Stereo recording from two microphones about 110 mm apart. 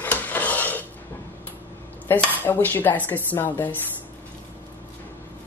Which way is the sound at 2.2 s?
15° left (ahead or behind).